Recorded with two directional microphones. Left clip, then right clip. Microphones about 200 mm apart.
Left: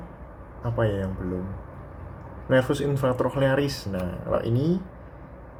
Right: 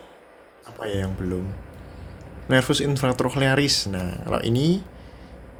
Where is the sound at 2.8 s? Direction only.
20° right (ahead or behind).